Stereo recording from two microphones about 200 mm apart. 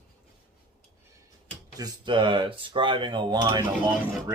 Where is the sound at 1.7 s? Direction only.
20° right (ahead or behind).